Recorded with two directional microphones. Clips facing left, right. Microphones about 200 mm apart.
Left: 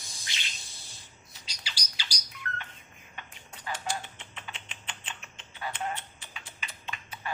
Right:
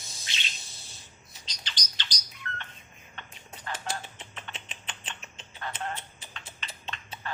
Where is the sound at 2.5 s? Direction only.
20° right (ahead or behind).